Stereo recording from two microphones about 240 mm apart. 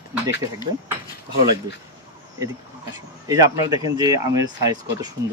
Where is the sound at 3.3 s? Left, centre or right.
Centre.